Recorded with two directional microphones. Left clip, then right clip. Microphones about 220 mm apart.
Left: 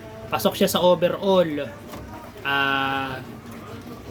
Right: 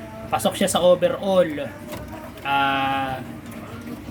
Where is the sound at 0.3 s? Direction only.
15° left (ahead or behind).